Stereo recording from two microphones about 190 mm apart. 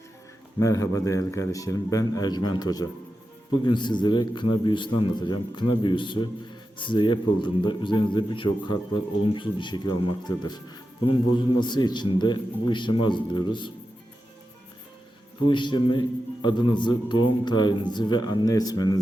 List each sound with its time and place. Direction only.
0.6 s a man's voice: 15° left (ahead or behind)
15.4 s a man's voice: 25° left (ahead or behind)